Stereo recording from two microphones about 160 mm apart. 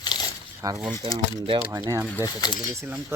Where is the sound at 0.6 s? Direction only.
25° right (ahead or behind).